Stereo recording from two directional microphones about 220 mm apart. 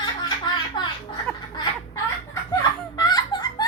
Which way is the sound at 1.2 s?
20° left (ahead or behind).